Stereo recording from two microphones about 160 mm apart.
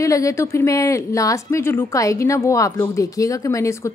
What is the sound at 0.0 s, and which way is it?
A woman's voice, 20° left (ahead or behind).